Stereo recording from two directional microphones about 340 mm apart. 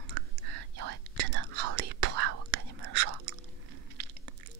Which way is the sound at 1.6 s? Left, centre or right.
Right.